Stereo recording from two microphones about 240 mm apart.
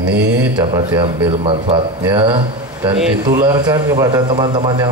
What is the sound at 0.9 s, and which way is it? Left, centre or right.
Speech, centre.